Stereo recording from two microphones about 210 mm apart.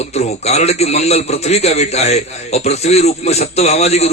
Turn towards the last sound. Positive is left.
turn(degrees=30)  # may be behind; listen again after turning